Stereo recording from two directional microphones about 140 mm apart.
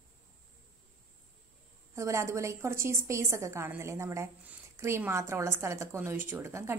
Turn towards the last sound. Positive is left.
turn(degrees=-20)  # may be behind; listen again after turning